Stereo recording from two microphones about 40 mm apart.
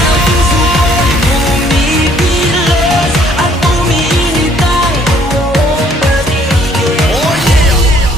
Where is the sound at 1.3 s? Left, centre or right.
Centre.